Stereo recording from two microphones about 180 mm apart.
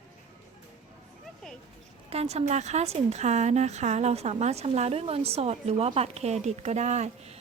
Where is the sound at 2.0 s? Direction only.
35° right (ahead or behind).